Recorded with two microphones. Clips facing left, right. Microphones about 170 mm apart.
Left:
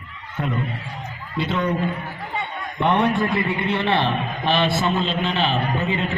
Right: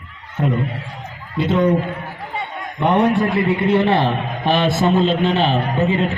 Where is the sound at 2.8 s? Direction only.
40° right (ahead or behind).